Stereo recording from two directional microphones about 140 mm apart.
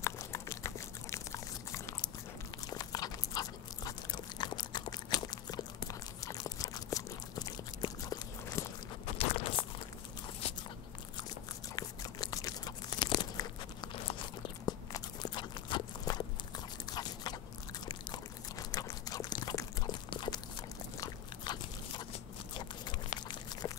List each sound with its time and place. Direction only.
0.0 s a sound: 20° left (ahead or behind)
2.6 s biting: 30° left (ahead or behind)
7.8 s walk: 25° left (ahead or behind)
9.2 s crunch: 40° left (ahead or behind)
10.4 s biting: 45° left (ahead or behind)
11.7 s crunch: 25° left (ahead or behind)
14.7 s a sound: 25° left (ahead or behind)
21.0 s biting: 30° left (ahead or behind)